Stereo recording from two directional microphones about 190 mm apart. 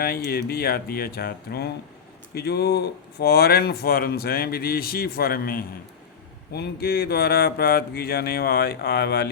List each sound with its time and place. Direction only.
0.0 s speech: 55° left (ahead or behind)